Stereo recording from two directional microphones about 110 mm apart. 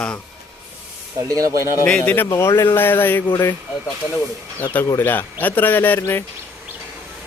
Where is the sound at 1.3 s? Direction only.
30° right (ahead or behind).